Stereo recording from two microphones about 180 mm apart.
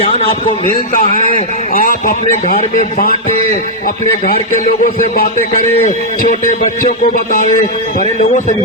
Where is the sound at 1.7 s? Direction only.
50° left (ahead or behind).